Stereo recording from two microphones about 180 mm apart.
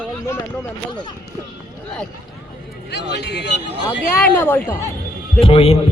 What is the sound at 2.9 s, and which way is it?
Speech, 70° left (ahead or behind).